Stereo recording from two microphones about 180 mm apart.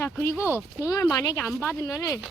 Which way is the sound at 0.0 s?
15° left (ahead or behind).